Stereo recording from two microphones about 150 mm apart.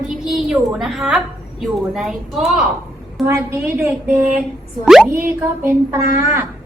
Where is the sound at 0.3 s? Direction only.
5° right (ahead or behind).